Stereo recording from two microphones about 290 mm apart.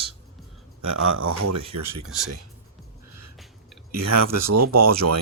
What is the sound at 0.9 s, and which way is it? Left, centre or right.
Speech, right.